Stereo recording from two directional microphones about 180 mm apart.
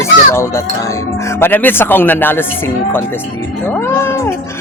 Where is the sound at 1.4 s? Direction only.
10° left (ahead or behind).